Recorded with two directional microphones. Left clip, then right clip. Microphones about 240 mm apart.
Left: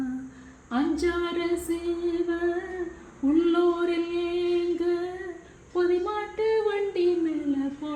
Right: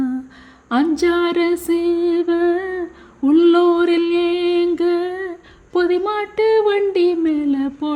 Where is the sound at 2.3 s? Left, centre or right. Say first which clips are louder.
Right 11 dB; right.